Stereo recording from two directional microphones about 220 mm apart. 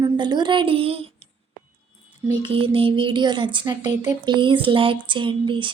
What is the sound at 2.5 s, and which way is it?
Speech, 25° right (ahead or behind).